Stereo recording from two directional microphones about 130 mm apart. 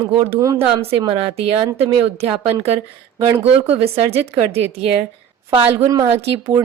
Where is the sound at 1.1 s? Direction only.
50° right (ahead or behind).